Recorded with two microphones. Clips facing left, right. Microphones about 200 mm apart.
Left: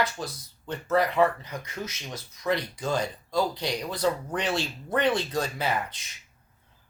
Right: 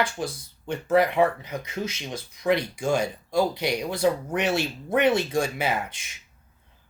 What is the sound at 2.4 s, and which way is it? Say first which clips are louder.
Speech: right 4 dB; 15° right (ahead or behind).